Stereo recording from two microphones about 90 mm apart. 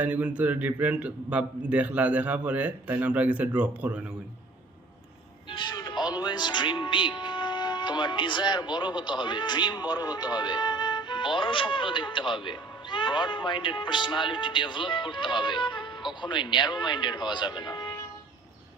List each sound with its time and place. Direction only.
0.0 s a man's voice: 15° right (ahead or behind)
5.5 s speech: 55° left (ahead or behind)